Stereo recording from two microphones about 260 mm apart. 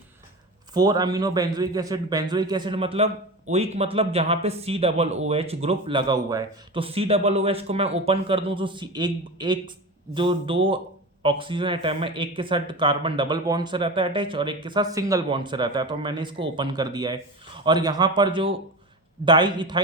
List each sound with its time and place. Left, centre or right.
0.7 s a man's voice: centre